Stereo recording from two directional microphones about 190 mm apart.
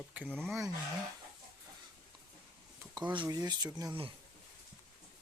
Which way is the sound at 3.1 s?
20° right (ahead or behind).